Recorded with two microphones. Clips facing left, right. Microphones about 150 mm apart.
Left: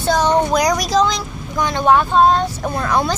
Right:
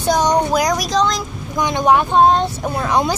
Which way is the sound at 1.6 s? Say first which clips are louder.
Even; 15° right (ahead or behind).